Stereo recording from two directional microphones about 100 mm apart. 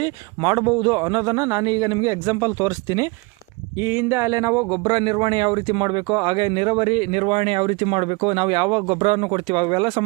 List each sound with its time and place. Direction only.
0.0 s a man's voice: 50° right (ahead or behind)
3.8 s speech: 20° right (ahead or behind)
4.7 s speech: 50° right (ahead or behind)
8.9 s speech: 85° right; by 10.0 s 50° right (ahead or behind)